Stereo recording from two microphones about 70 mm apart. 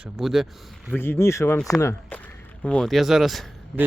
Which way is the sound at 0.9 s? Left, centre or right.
Left.